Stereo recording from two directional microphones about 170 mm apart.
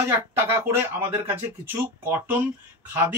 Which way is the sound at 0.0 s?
15° right (ahead or behind).